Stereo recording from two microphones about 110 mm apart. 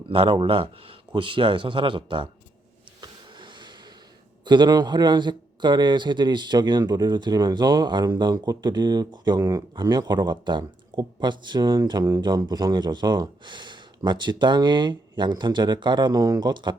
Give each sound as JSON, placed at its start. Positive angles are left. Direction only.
{"t": 0.0, "sound": "speech", "side_deg": -60}
{"t": 3.0, "sound": "vehicle", "side_deg": -45}
{"t": 4.4, "sound": "a man's voice", "side_deg": -40}